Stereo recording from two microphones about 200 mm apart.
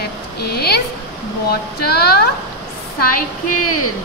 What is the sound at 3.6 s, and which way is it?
Speech, 90° left.